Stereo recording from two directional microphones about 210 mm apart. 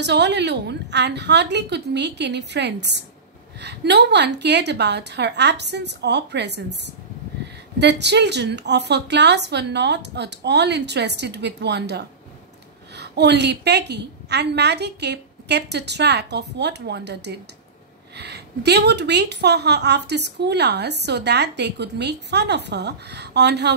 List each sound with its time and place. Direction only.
0.0 s a woman's voice: 55° right (ahead or behind)